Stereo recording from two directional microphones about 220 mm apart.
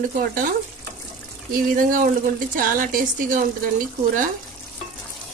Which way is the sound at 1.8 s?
40° right (ahead or behind).